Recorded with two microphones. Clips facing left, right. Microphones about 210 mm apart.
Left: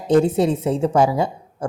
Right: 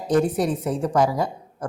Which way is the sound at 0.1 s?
25° left (ahead or behind).